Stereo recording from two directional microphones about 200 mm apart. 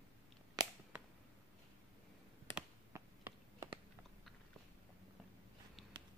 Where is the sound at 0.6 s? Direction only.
20° right (ahead or behind).